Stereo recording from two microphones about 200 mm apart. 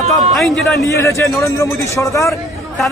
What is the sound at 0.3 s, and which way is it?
Speech, centre (ahead or behind).